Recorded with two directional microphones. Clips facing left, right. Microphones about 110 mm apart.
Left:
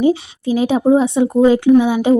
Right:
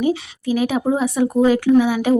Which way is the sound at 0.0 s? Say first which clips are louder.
Left 5 dB; 25° left (ahead or behind).